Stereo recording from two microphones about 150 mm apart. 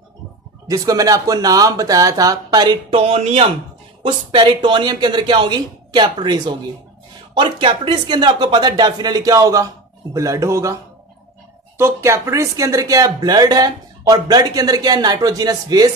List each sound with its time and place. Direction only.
0.7 s speech: 25° right (ahead or behind)
3.0 s speech: 40° right (ahead or behind); by 10.8 s 20° right (ahead or behind)
11.8 s speech: 20° right (ahead or behind)